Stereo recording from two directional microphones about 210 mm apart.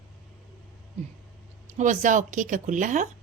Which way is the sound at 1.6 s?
35° right (ahead or behind).